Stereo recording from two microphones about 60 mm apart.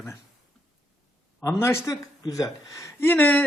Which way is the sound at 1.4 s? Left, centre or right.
Left.